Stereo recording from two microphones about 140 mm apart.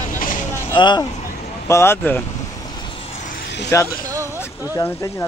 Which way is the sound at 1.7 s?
15° left (ahead or behind).